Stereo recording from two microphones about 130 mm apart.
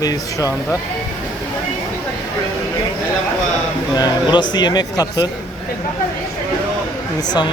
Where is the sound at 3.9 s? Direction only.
35° left (ahead or behind).